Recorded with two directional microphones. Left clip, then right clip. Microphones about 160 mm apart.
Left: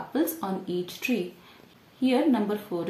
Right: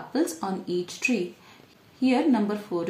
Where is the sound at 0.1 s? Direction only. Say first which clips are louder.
Right 1 dB; 25° right (ahead or behind).